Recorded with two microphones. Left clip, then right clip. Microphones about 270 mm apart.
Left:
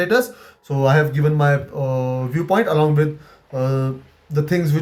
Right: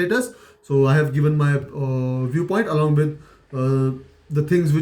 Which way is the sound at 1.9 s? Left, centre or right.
Left.